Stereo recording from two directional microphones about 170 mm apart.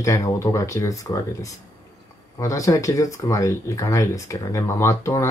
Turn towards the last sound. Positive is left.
turn(degrees=15)  # may be behind; listen again after turning